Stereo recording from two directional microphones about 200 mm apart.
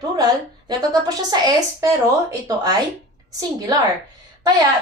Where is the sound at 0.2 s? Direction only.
20° right (ahead or behind).